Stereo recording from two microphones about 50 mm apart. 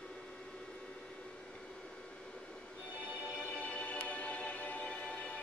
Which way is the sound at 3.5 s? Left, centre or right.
Left.